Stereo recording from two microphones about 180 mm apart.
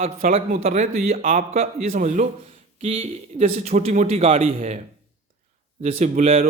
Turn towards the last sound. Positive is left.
turn(degrees=-40)  # may be behind; listen again after turning